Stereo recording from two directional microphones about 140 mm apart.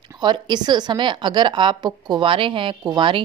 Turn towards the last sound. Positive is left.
turn(degrees=-35)  # may be behind; listen again after turning